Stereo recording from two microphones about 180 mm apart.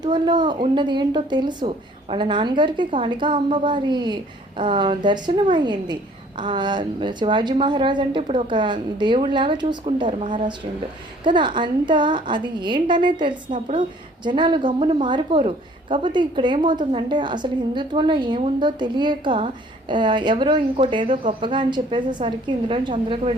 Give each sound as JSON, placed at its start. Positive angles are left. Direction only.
{"t": 0.0, "sound": "a woman's voice", "side_deg": -25}